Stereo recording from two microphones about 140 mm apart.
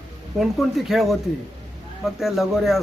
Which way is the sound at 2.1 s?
Centre (ahead or behind).